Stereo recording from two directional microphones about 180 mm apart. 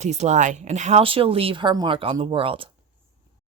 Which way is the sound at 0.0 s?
40° right (ahead or behind).